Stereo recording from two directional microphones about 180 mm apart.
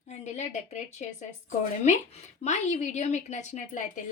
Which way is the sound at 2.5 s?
40° left (ahead or behind).